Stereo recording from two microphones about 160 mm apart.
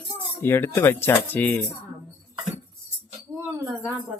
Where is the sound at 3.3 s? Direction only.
25° right (ahead or behind).